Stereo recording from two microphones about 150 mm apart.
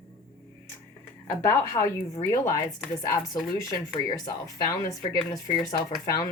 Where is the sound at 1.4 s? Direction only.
20° left (ahead or behind).